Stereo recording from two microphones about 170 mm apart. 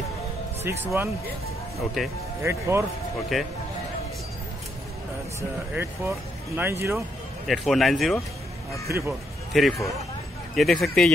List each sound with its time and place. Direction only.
0.7 s speech: 15° right (ahead or behind)
2.4 s speech: 15° right (ahead or behind)
3.3 s a man's voice: centre (ahead or behind)
5.8 s speech: 15° right (ahead or behind)
7.4 s a man's voice: centre (ahead or behind)
8.8 s speech: 15° right (ahead or behind)
9.5 s a man's voice: centre (ahead or behind)